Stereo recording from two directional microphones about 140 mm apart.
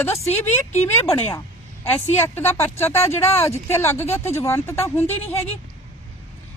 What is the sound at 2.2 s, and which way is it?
Speech, 15° left (ahead or behind).